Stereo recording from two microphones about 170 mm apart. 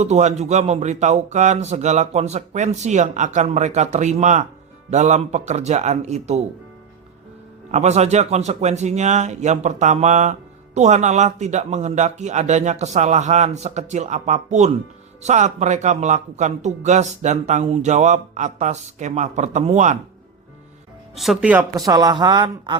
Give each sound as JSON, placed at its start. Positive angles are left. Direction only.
{"t": 0.0, "sound": "a man's voice", "side_deg": -40}
{"t": 7.7, "sound": "a man's voice", "side_deg": -40}
{"t": 21.2, "sound": "speech", "side_deg": -5}
{"t": 21.8, "sound": "speech", "side_deg": -20}